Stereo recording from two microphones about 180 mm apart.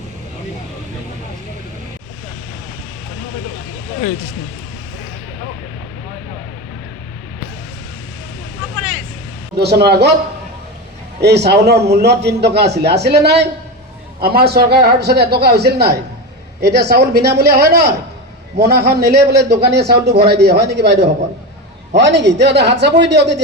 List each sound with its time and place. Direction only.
9.6 s a man's voice: 65° right (ahead or behind)
11.2 s a man's voice: 65° right (ahead or behind)